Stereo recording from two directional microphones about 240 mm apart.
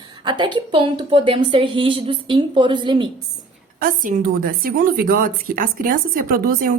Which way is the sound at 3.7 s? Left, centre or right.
Right.